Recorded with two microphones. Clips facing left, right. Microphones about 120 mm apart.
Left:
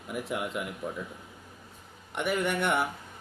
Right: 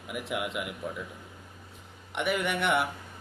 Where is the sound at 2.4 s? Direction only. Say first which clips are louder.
Left 2 dB; 40° left (ahead or behind).